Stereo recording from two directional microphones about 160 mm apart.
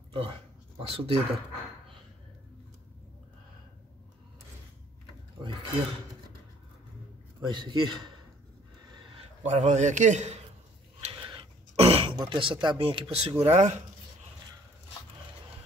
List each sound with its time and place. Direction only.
0.1 s speech: 35° right (ahead or behind)
7.4 s a man's voice: 30° right (ahead or behind)
9.4 s a man's voice: 45° right (ahead or behind)
11.0 s throat clearing: 35° right (ahead or behind)
12.2 s speech: 30° right (ahead or behind)
13.5 s a man's voice: 45° right (ahead or behind)